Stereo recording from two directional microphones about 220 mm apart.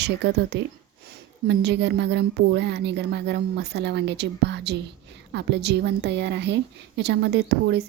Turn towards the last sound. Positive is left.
turn(degrees=-50)  # may be behind; listen again after turning